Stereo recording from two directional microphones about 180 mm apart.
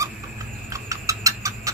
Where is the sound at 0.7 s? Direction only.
20° right (ahead or behind).